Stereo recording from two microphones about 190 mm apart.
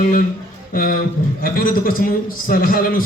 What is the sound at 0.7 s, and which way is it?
A man's voice, 45° left (ahead or behind).